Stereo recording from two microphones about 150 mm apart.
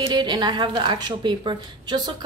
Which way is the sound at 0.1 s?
30° right (ahead or behind).